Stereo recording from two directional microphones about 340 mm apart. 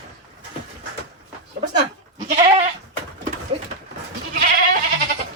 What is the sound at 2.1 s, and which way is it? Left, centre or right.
Goat, centre.